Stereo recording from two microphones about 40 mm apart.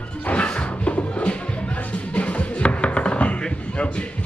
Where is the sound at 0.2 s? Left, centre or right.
Left.